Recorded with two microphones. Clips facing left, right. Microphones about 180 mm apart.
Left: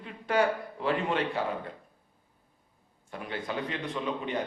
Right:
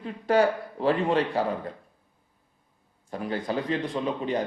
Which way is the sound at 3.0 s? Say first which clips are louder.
Right 6 dB; 35° right (ahead or behind).